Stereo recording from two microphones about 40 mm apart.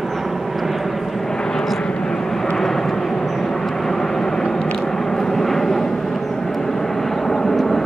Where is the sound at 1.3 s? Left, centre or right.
Centre.